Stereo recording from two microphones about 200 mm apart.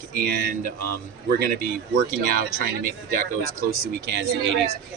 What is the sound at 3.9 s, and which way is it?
Speech, 60° right (ahead or behind).